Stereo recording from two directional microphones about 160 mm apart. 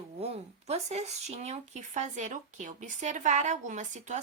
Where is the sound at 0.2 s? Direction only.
40° right (ahead or behind).